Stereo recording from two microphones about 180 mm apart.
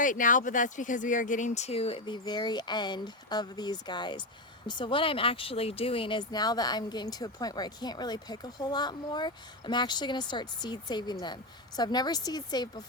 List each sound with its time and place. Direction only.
0.0 s speech: 45° left (ahead or behind); by 12.6 s 20° left (ahead or behind)